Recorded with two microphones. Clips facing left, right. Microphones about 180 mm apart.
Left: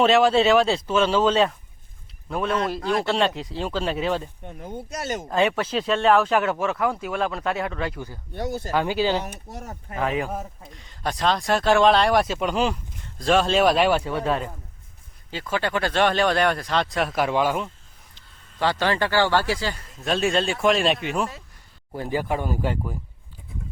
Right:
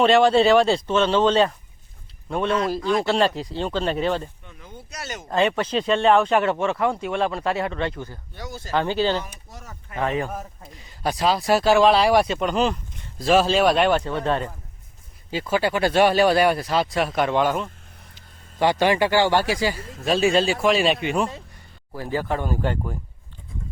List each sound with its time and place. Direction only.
0.0 s speech: centre (ahead or behind)
4.4 s speech: 50° left (ahead or behind)
5.3 s speech: 5° left (ahead or behind)
8.4 s speech: 55° left (ahead or behind)
8.7 s speech: 10° left (ahead or behind)
9.2 s speech: 60° left (ahead or behind)
9.9 s speech: 5° left (ahead or behind)
13.1 s speech: 5° right (ahead or behind)
15.3 s speech: 10° right (ahead or behind); by 17.7 s 5° left (ahead or behind)
18.6 s speech: 15° right (ahead or behind)
20.1 s speech: centre (ahead or behind)
21.9 s speech: 20° left (ahead or behind)